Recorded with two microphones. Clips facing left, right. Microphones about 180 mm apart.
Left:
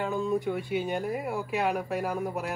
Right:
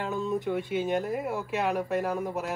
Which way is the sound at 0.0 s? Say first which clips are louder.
Left 2 dB; centre (ahead or behind).